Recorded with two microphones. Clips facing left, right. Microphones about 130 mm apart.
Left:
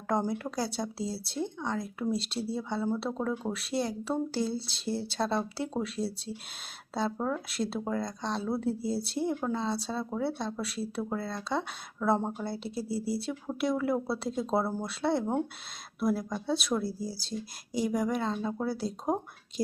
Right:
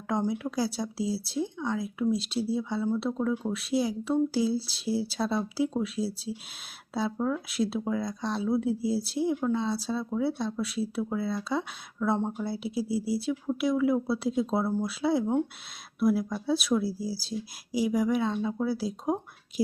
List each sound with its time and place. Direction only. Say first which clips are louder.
0.1 s speech: right 1 dB; centre (ahead or behind)